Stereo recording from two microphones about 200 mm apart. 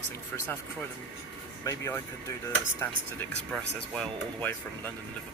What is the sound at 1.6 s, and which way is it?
Speech, 15° left (ahead or behind).